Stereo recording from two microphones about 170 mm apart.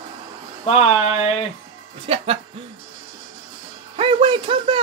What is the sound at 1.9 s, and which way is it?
Speech, 35° right (ahead or behind).